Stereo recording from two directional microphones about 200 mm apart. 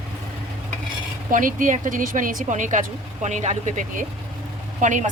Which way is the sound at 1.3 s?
40° right (ahead or behind).